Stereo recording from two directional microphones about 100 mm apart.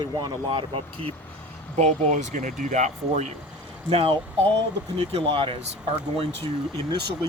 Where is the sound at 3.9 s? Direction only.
70° right (ahead or behind).